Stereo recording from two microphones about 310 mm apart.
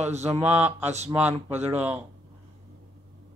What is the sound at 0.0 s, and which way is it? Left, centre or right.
Mantra, right.